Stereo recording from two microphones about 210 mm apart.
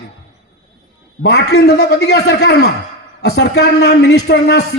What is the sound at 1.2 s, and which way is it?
Speech, 50° left (ahead or behind).